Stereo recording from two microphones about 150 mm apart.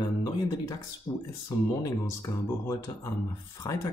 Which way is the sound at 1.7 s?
25° left (ahead or behind).